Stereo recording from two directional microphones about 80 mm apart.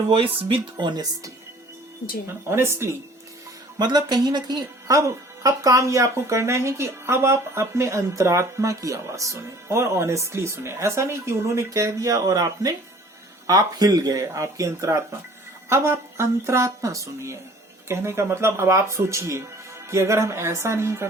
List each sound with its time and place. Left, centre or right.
0.4 s speech: right
2.2 s speech: right
3.8 s speech: right
4.9 s speech: right
14.1 s speech: right